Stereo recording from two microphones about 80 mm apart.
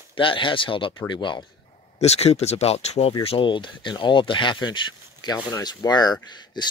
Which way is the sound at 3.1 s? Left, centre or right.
Left.